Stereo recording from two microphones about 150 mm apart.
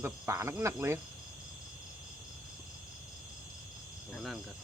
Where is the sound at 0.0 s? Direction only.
20° right (ahead or behind).